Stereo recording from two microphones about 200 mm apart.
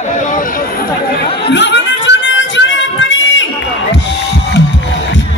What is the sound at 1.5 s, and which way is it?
Music, 60° left (ahead or behind).